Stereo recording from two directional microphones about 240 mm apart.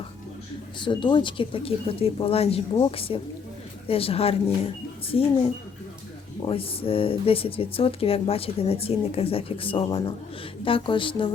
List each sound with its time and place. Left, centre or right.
0.8 s speech: centre